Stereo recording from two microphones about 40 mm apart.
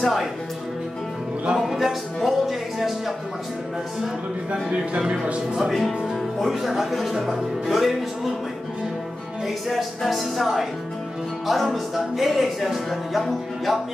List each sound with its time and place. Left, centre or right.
0.0 s speech: centre
1.7 s music: centre
4.5 s speech: right
5.6 s music: centre
9.7 s music: centre